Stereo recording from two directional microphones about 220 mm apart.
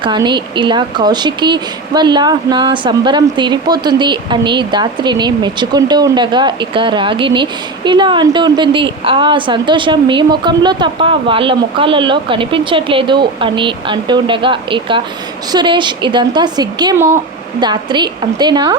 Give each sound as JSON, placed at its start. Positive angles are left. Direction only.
{"t": 0.0, "sound": "speech", "side_deg": -20}